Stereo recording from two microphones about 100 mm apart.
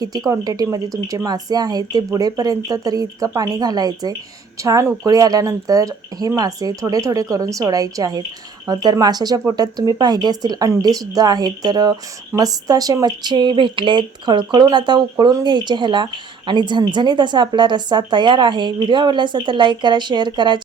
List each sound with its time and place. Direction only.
0.3 s a woman's voice: 40° right (ahead or behind)